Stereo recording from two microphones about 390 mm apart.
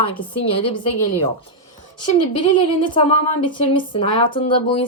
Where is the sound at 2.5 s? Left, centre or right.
Centre.